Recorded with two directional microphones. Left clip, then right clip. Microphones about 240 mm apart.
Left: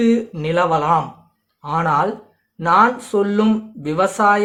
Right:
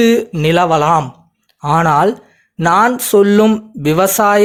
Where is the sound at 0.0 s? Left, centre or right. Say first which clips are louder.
Right 7 dB; right.